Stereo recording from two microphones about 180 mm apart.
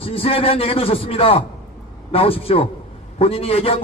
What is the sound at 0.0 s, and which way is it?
A man's voice, 30° left (ahead or behind).